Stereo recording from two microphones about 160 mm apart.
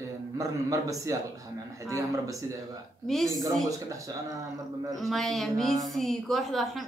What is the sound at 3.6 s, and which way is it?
Speech, 20° right (ahead or behind).